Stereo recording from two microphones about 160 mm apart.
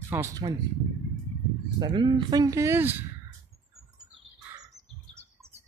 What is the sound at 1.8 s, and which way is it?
Speech, 30° right (ahead or behind).